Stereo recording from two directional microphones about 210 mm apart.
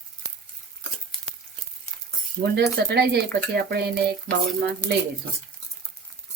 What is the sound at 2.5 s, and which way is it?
Speech, 50° right (ahead or behind).